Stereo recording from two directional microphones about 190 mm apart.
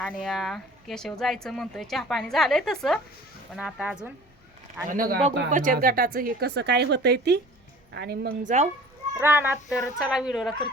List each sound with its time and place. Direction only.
0.0 s speech: 5° left (ahead or behind)
4.9 s speech: 50° right (ahead or behind)
8.4 s a child's voice: 40° right (ahead or behind)
9.1 s speech: 10° right (ahead or behind)